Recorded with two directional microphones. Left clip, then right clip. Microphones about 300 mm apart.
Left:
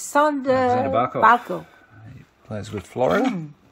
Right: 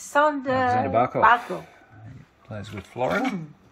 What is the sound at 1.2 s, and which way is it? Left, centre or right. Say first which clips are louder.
Speech: left 4 dB; left.